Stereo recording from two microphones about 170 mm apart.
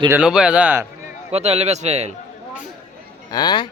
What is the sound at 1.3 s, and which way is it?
Speech, 35° right (ahead or behind).